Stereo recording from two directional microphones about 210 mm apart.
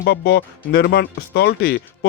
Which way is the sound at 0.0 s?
50° left (ahead or behind).